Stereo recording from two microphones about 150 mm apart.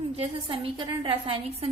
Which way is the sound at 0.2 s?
40° right (ahead or behind).